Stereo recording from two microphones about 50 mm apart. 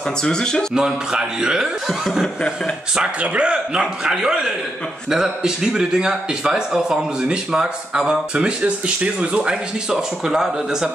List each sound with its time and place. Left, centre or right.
0.2 s speech: centre
0.7 s speech: centre
3.2 s speech: right